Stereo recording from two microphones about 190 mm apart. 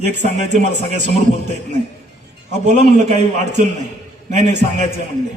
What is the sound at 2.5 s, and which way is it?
Speech, 35° right (ahead or behind).